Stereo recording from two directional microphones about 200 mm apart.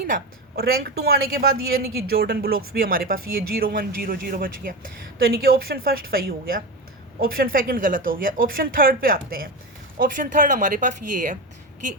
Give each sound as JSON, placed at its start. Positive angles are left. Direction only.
{"t": 0.1, "sound": "a woman's voice", "side_deg": -50}